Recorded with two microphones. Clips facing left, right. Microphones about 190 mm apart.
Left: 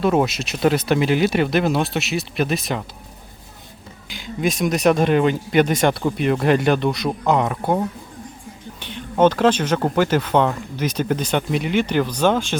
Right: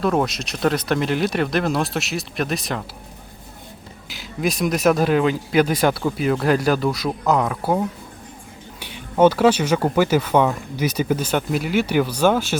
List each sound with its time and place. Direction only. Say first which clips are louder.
0.0 s speech: left 2 dB; 5° left (ahead or behind)
4.1 s speech: left 1 dB; centre (ahead or behind)
8.8 s speech: right 1 dB; 10° right (ahead or behind)